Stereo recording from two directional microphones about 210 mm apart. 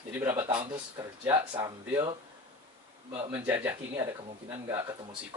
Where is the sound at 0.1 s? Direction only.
10° right (ahead or behind).